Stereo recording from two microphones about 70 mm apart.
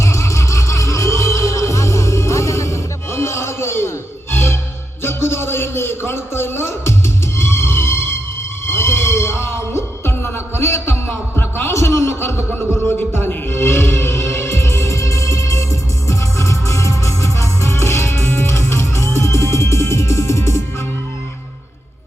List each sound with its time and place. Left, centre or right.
0.0 s music: left
5.0 s a sound: left
11.7 s chuckle: left
13.0 s music: left